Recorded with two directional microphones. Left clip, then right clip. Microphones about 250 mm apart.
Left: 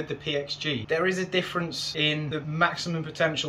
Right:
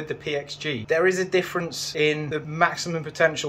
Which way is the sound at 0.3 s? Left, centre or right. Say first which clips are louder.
Even; centre.